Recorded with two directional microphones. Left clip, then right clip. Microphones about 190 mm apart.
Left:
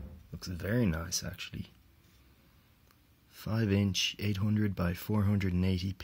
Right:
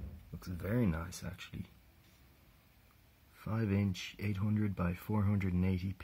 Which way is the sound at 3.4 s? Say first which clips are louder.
Left 5 dB; 30° left (ahead or behind).